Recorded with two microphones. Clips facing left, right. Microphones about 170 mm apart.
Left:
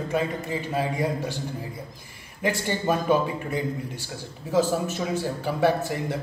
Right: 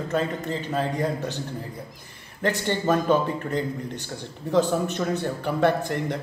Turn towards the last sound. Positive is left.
turn(degrees=5)  # may be behind; listen again after turning